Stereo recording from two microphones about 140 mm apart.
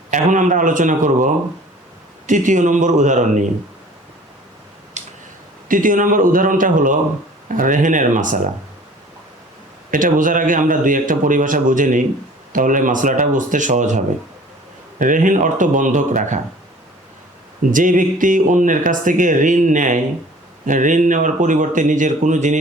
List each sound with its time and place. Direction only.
0.1 s speech: 65° right (ahead or behind)
5.6 s speech: 75° right (ahead or behind)
9.9 s speech: 75° right (ahead or behind)
14.9 s speech: 70° right (ahead or behind)
17.7 s speech: 70° right (ahead or behind)